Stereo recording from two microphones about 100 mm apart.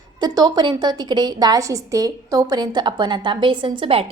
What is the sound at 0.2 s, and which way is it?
A woman's voice, 40° right (ahead or behind).